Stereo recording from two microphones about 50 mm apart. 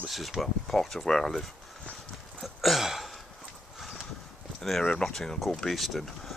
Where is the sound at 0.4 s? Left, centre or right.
Centre.